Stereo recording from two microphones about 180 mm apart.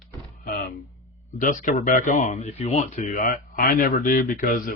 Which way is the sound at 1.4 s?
45° left (ahead or behind).